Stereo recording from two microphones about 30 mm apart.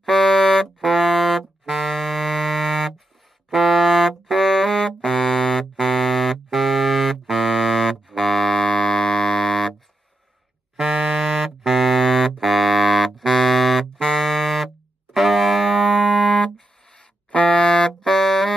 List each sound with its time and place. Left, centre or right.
0.0 s wind instrument: centre
3.4 s music: centre
4.1 s brass instrument: centre
5.5 s music: centre
10.8 s a sound: centre
12.4 s music: centre
16.3 s music: left
17.3 s music: left
17.6 s music: centre